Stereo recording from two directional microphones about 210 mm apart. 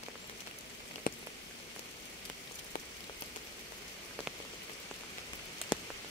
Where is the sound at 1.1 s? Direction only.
45° left (ahead or behind).